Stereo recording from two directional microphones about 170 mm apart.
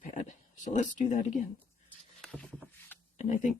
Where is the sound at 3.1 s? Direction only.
45° left (ahead or behind).